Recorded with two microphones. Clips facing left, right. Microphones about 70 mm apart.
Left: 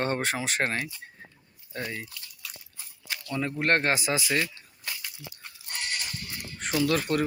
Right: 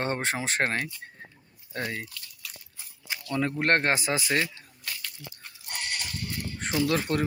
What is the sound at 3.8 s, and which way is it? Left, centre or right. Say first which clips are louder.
Speech: even; right.